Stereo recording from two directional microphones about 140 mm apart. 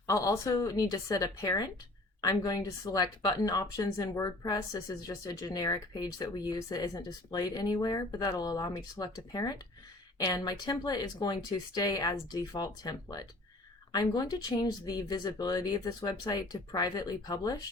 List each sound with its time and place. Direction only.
0.1 s speech: 25° left (ahead or behind)